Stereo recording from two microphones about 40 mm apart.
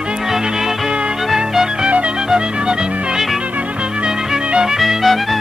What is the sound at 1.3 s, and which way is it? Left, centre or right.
Music, centre.